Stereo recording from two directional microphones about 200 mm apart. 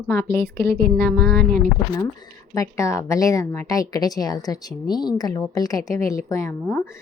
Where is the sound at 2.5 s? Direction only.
15° left (ahead or behind).